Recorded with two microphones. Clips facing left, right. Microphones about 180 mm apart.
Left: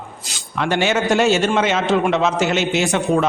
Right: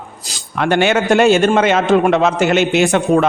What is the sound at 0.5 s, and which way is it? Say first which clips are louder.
A man's voice: right 4 dB; 55° right (ahead or behind).